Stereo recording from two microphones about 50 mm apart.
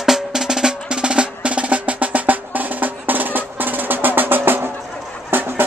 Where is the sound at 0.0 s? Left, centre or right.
Centre; by 5.7 s right.